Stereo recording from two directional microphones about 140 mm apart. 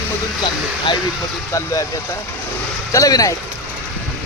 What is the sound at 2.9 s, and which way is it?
Speech, 25° left (ahead or behind).